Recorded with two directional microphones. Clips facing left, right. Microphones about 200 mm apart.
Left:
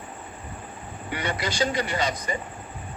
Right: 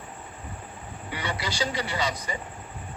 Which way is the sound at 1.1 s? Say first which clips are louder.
Left 3 dB; 50° left (ahead or behind).